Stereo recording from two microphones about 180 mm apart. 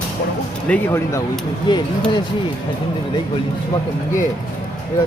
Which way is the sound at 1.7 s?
25° left (ahead or behind).